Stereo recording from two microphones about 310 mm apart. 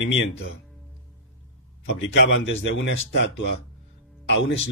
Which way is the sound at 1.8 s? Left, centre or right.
Left.